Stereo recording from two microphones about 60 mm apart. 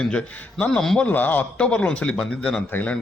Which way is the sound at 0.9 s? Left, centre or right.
Left.